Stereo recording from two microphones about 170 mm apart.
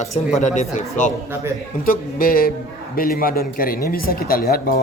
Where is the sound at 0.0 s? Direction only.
45° left (ahead or behind).